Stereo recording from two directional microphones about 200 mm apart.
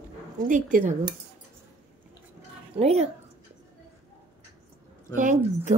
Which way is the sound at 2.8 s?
30° right (ahead or behind).